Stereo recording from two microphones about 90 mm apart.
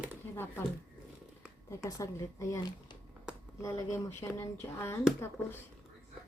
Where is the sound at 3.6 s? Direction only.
35° left (ahead or behind).